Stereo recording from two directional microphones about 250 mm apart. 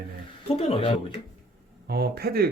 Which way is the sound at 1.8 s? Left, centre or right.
Right.